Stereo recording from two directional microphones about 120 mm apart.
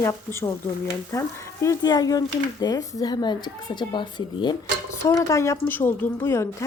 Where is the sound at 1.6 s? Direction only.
30° left (ahead or behind).